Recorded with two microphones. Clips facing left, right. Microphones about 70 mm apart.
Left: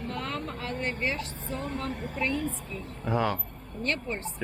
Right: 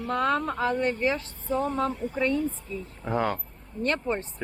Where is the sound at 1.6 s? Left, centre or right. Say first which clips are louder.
Right 6 dB; left.